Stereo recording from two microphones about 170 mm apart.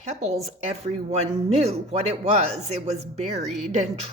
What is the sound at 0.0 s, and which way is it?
A woman's voice, 40° right (ahead or behind).